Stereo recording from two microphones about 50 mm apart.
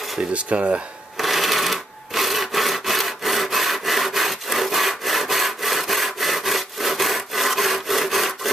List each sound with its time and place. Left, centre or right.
0.3 s speech: right
1.1 s rub: centre